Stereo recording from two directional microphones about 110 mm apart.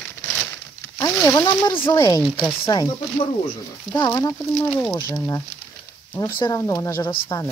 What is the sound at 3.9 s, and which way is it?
Speech, 35° left (ahead or behind).